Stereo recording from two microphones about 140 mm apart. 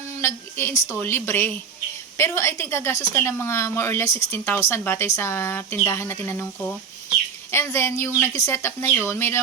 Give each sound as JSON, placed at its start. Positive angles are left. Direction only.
{"t": 0.2, "sound": "a woman's voice", "side_deg": 15}
{"t": 7.5, "sound": "a woman's voice", "side_deg": 20}